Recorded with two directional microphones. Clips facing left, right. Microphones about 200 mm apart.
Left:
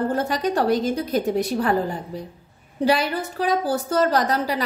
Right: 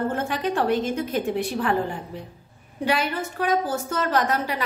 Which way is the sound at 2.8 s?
35° left (ahead or behind).